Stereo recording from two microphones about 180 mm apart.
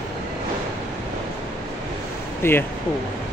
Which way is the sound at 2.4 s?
15° left (ahead or behind).